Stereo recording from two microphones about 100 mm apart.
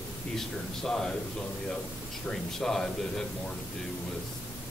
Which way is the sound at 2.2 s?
5° left (ahead or behind).